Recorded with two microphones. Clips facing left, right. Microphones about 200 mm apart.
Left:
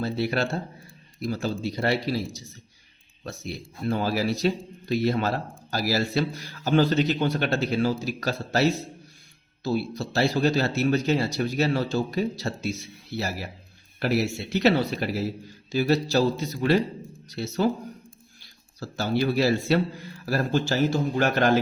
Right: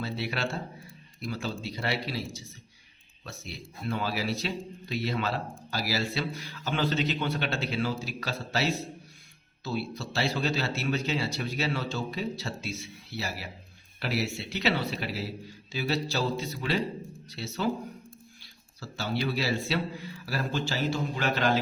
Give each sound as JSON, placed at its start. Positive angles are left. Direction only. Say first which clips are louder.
{"t": 0.0, "sound": "speech", "louder": "left 7 dB", "side_deg": 40}
{"t": 3.8, "sound": "speech", "louder": "left 6 dB", "side_deg": 40}
{"t": 18.8, "sound": "speech", "louder": "left 6 dB", "side_deg": 45}